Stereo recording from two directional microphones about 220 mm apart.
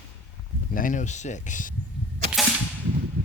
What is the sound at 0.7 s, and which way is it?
Speech, 40° left (ahead or behind).